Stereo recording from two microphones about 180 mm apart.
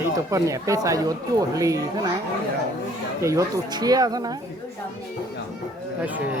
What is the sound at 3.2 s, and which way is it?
Speech, 15° right (ahead or behind).